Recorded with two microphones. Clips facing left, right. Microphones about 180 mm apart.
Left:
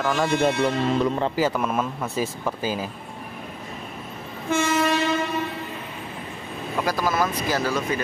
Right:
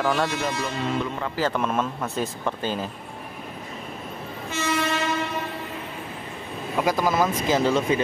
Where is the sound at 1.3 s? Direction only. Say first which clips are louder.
Left 1 dB; 10° left (ahead or behind).